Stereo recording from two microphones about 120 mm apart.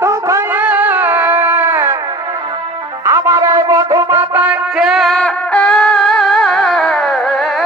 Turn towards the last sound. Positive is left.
turn(degrees=0)  # may be behind; listen again after turning